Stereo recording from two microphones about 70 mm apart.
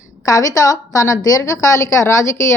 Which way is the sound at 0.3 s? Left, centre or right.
Left.